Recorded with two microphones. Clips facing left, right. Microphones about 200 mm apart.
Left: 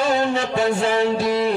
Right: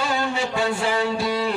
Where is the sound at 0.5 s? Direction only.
20° left (ahead or behind).